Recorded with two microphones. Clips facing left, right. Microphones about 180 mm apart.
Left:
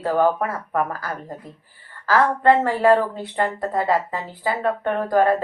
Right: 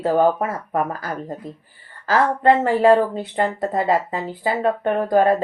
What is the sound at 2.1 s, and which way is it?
Speech, 20° right (ahead or behind).